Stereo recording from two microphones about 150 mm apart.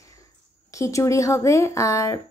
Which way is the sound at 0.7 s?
20° left (ahead or behind).